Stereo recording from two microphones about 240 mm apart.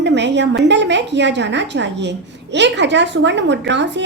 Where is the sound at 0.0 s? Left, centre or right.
Right.